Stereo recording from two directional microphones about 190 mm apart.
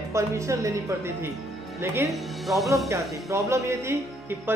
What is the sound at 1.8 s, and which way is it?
Speech, 15° right (ahead or behind).